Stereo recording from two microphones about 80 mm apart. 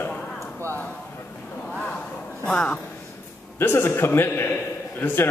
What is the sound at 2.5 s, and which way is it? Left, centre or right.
Speech, centre.